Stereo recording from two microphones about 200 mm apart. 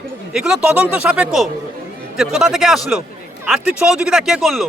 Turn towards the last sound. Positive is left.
turn(degrees=0)  # may be behind; listen again after turning